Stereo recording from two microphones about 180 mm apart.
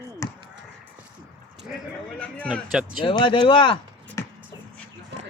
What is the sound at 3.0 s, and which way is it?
Speech, 30° left (ahead or behind).